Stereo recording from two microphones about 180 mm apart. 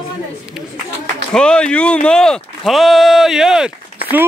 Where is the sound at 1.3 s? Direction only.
5° left (ahead or behind).